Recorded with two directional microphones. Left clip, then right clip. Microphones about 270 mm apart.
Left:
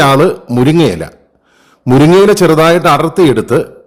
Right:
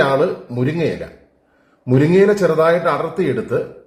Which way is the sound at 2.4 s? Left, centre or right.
Left.